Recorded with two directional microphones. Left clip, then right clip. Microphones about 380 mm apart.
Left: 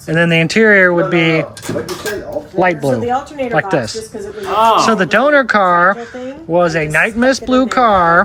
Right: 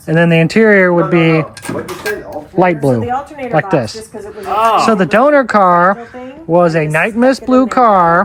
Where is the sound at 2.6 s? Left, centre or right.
Centre.